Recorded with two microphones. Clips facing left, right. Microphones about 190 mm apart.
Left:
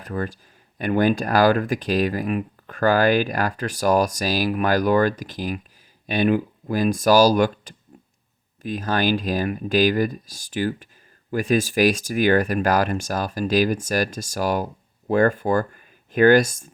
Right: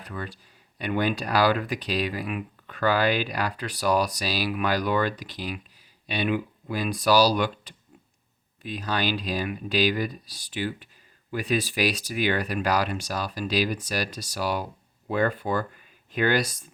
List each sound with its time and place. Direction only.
0.0 s speech: 45° left (ahead or behind)